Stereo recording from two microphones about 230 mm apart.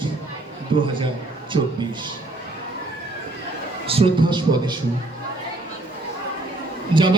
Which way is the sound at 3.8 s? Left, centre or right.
Right.